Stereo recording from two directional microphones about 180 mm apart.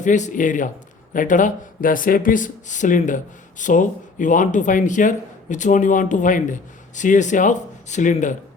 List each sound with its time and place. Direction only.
0.0 s speech: 45° left (ahead or behind)